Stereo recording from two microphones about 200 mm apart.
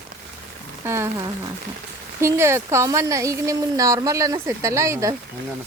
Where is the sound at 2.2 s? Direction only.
15° right (ahead or behind).